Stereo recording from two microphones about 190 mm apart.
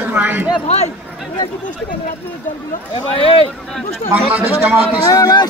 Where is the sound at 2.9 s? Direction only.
30° left (ahead or behind).